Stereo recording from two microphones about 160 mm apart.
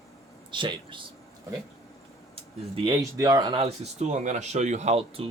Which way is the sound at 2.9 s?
20° right (ahead or behind).